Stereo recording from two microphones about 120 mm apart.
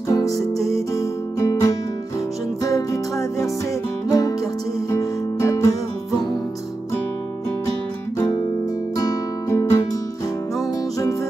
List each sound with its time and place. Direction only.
0.1 s music: 30° left (ahead or behind)
8.9 s music: 30° left (ahead or behind)